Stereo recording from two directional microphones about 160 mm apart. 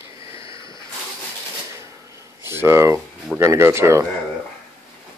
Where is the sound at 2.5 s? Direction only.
15° right (ahead or behind).